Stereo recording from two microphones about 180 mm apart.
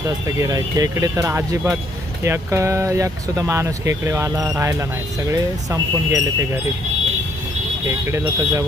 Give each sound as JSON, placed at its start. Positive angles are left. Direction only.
{"t": 0.3, "sound": "speech", "side_deg": -20}
{"t": 7.9, "sound": "speech", "side_deg": -15}